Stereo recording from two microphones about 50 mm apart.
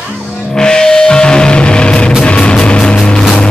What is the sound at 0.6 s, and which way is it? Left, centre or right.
Music, centre.